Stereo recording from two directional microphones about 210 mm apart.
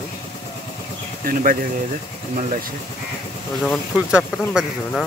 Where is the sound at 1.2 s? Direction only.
40° right (ahead or behind).